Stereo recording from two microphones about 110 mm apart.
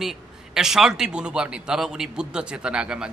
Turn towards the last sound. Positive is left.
turn(degrees=-10)  # may be behind; listen again after turning